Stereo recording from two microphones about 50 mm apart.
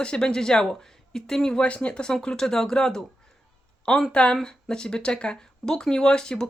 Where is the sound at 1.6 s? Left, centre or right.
Left.